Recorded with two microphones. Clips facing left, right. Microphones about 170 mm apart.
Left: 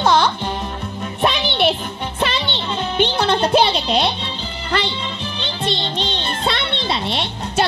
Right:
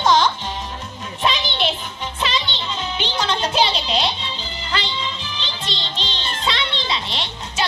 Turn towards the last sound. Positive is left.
turn(degrees=55)  # may be behind; listen again after turning